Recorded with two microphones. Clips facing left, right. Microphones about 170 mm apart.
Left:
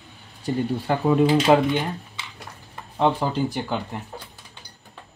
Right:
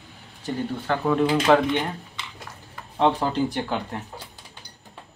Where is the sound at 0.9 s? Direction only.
15° left (ahead or behind).